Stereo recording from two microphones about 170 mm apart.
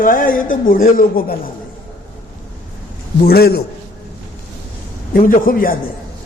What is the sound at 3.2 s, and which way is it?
Speech, 65° left (ahead or behind).